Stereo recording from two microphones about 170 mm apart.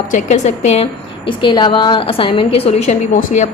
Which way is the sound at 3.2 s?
45° left (ahead or behind).